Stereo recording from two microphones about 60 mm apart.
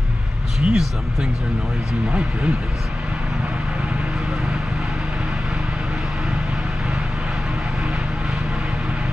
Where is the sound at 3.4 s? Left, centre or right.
Centre.